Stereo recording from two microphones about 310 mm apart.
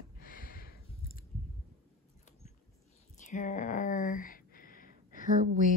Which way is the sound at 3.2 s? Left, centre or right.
Left.